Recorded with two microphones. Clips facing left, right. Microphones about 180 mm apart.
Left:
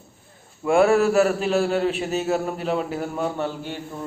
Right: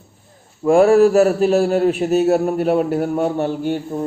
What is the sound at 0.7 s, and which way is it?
Speech, 35° right (ahead or behind).